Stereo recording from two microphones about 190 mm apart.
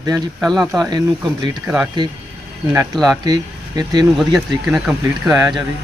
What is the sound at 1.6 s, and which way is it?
Speech, 5° right (ahead or behind).